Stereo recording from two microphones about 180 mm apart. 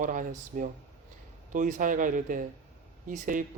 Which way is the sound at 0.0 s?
45° right (ahead or behind).